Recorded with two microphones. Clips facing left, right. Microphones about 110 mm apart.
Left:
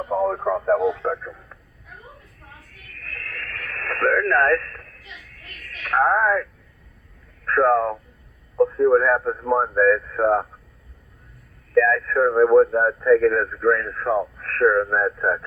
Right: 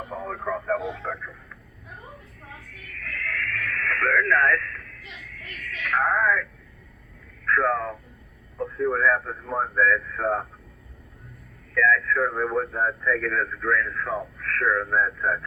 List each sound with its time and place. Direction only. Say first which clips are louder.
0.1 s speech: left 10 dB; 35° left (ahead or behind)
2.8 s radio: right 4 dB; 35° left (ahead or behind)
7.4 s speech: left 6 dB; 35° left (ahead or behind)
11.7 s speech: left 4 dB; 35° left (ahead or behind)